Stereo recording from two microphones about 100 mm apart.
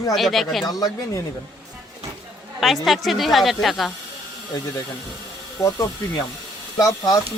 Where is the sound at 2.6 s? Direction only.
Centre (ahead or behind).